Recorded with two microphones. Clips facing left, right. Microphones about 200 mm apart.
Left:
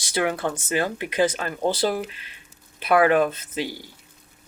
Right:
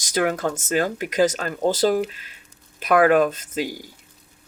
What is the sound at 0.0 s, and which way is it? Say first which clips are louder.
Speech: right 2 dB; 45° right (ahead or behind).